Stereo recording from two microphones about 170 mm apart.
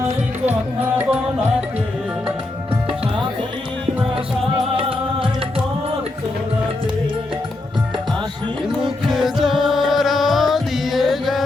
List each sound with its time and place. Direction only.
0.4 s music: 10° right (ahead or behind)
4.8 s music: 30° right (ahead or behind)
8.8 s music: centre (ahead or behind)